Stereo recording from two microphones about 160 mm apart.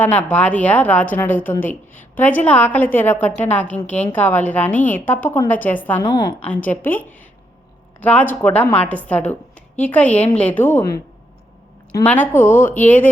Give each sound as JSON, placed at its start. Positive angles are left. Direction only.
{"t": 0.0, "sound": "a woman's voice", "side_deg": 10}
{"t": 6.0, "sound": "a woman's voice", "side_deg": 25}
{"t": 6.4, "sound": "a woman's voice", "side_deg": 10}
{"t": 12.0, "sound": "a woman's voice", "side_deg": 10}